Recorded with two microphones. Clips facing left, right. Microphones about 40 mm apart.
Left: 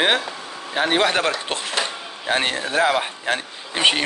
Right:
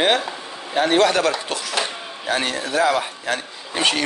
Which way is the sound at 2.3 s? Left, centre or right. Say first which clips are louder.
Left 1 dB; left.